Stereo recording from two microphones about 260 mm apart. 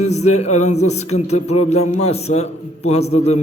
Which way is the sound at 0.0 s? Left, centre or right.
Left.